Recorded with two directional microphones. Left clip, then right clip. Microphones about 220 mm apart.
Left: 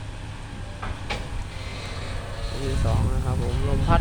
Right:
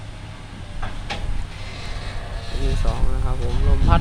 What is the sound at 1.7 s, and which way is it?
Vehicle, 45° right (ahead or behind).